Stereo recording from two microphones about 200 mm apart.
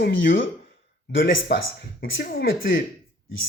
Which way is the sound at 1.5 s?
60° left (ahead or behind).